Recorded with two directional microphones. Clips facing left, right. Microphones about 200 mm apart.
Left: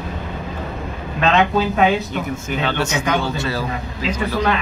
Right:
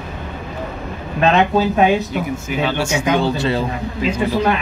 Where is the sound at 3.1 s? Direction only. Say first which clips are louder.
Right 4 dB; 25° right (ahead or behind).